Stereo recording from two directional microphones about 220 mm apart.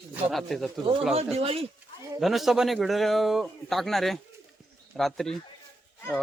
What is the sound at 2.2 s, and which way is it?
A man's voice, centre (ahead or behind).